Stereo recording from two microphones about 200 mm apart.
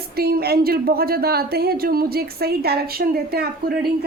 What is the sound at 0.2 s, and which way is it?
Speech, 50° right (ahead or behind).